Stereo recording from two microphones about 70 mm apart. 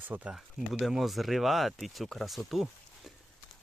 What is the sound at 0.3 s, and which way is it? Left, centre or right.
Speech, centre.